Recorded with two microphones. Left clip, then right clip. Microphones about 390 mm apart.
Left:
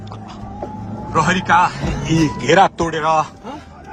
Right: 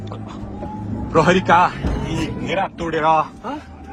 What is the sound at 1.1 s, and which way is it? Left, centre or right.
Speech, centre.